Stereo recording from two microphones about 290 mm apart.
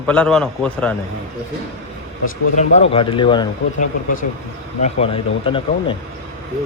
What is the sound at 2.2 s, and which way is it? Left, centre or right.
Speech, left.